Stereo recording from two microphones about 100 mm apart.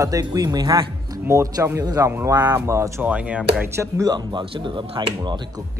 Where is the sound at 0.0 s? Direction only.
40° right (ahead or behind).